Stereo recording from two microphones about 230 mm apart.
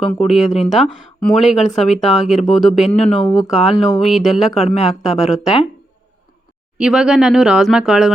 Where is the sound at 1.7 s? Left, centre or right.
Left.